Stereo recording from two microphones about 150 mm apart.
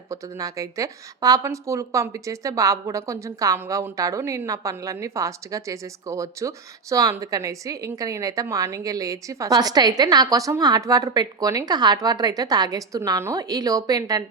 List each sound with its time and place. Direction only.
0.1 s a woman's voice: 20° right (ahead or behind)